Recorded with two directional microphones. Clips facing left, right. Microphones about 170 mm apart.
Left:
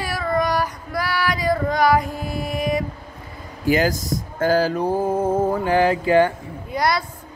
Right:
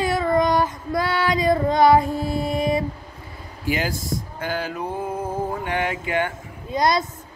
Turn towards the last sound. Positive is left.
turn(degrees=-20)  # may be behind; listen again after turning